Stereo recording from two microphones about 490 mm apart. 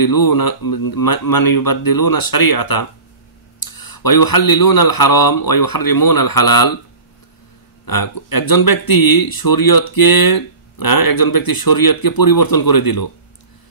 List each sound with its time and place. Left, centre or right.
0.0 s speech: left
7.8 s speech: left